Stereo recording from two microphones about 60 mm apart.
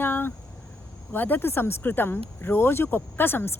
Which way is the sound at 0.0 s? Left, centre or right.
Left.